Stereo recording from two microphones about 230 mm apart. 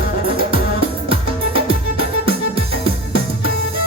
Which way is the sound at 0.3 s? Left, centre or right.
Right.